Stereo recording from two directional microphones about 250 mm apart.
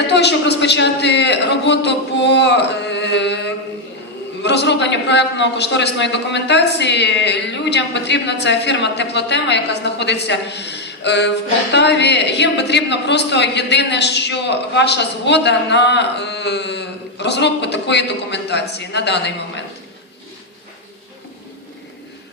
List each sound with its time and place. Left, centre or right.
0.1 s a woman's voice: left